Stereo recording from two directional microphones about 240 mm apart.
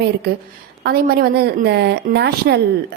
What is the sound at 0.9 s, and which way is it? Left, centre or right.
A woman's voice, right.